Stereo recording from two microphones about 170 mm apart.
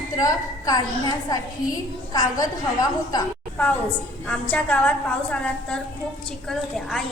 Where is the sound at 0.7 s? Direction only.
25° left (ahead or behind).